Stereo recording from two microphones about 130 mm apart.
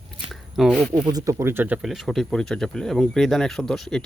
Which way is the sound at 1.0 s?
30° right (ahead or behind).